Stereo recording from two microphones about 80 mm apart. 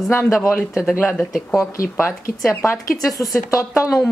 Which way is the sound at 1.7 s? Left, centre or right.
Left.